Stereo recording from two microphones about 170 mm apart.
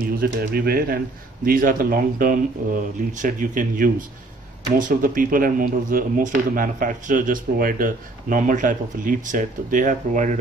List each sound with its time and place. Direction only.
0.0 s a man's voice: 60° right (ahead or behind)